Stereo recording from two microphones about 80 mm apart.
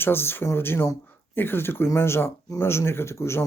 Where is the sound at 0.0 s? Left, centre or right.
Left.